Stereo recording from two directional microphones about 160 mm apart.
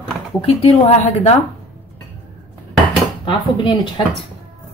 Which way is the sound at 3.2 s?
30° left (ahead or behind).